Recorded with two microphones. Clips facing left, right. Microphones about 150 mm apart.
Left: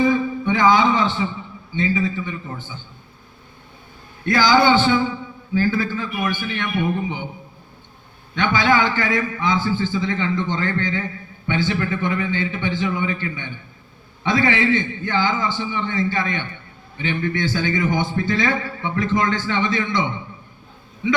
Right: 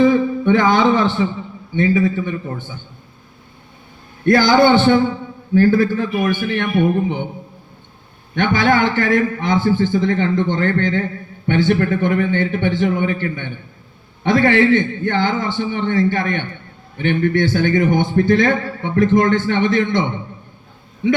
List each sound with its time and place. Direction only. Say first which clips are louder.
0.0 s a man's voice: right 5 dB; 60° right (ahead or behind)
4.3 s a man's voice: right 4 dB; 55° right (ahead or behind)
8.4 s a man's voice: right 3 dB; 55° right (ahead or behind)